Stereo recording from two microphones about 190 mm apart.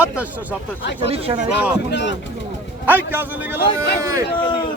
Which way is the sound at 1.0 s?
30° right (ahead or behind).